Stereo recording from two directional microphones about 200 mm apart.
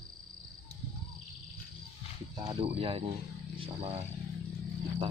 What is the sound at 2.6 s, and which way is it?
Speech, 30° right (ahead or behind).